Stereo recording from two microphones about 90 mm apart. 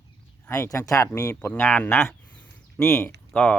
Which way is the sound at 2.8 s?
30° left (ahead or behind).